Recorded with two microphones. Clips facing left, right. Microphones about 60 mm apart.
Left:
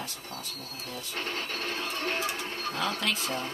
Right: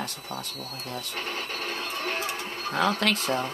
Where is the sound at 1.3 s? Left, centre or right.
Centre.